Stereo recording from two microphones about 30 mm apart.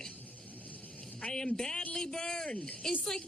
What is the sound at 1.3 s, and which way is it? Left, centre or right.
Speech, left.